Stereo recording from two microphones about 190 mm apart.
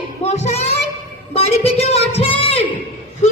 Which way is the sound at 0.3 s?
35° left (ahead or behind).